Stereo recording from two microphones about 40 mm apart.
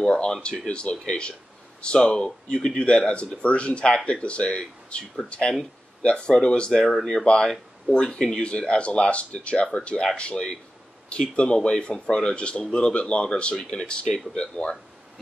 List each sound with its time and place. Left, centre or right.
0.0 s speech: left
6.7 s speech: centre